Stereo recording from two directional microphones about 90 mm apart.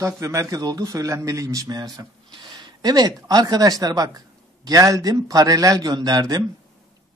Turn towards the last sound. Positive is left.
turn(degrees=-45)  # may be behind; listen again after turning